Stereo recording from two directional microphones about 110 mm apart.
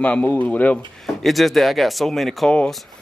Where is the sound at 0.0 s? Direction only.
15° left (ahead or behind).